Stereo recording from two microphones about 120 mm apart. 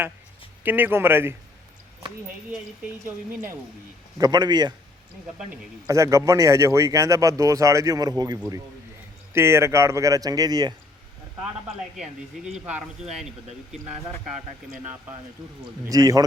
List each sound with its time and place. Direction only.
0.6 s speech: 15° right (ahead or behind)
4.2 s speech: 35° right (ahead or behind)
5.9 s speech: 25° right (ahead or behind)
9.3 s speech: 20° right (ahead or behind)
12.5 s speech: 5° right (ahead or behind)
15.9 s speech: 30° right (ahead or behind)